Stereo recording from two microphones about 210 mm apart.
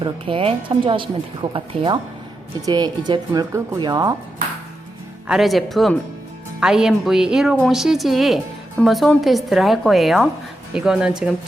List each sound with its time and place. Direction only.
0.0 s speech: 25° right (ahead or behind)
5.3 s speech: centre (ahead or behind)